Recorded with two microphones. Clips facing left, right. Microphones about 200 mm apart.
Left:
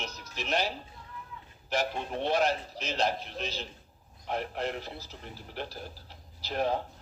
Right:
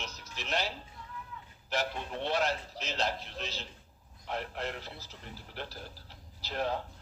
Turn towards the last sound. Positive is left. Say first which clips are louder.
# left 4 dB
turn(degrees=15)  # may be behind; listen again after turning